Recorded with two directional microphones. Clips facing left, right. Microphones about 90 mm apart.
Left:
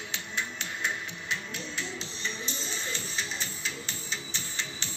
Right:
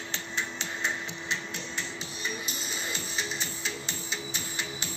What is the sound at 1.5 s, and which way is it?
Music, 5° right (ahead or behind).